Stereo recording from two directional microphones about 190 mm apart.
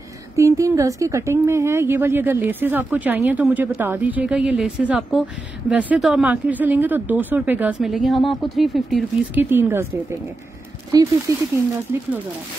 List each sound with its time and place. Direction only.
0.4 s speech: 15° right (ahead or behind); by 9.4 s centre (ahead or behind)
9.4 s speech: 10° right (ahead or behind)
10.9 s speech: 20° right (ahead or behind)